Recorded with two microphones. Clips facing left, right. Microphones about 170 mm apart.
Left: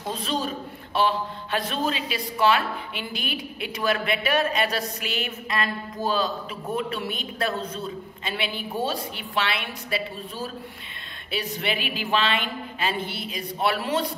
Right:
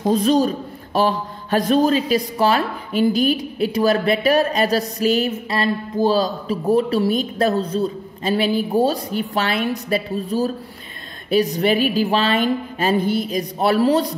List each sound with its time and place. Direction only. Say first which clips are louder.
0.0 s a man's voice: right 12 dB; 40° right (ahead or behind)